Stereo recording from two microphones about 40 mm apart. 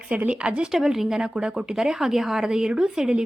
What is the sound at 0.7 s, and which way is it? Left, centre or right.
A woman's voice, centre.